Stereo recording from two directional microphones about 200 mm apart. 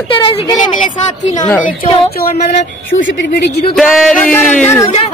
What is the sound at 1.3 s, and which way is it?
Speech, 20° left (ahead or behind).